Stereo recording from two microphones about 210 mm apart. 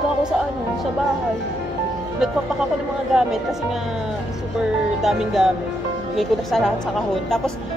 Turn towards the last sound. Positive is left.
turn(degrees=0)  # may be behind; listen again after turning